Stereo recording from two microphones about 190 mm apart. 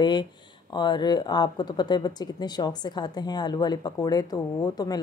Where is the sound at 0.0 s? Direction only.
25° left (ahead or behind).